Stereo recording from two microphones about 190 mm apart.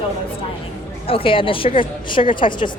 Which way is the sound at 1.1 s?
30° left (ahead or behind).